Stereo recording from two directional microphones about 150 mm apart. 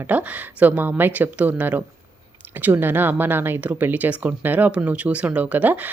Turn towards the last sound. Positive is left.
turn(degrees=-10)  # may be behind; listen again after turning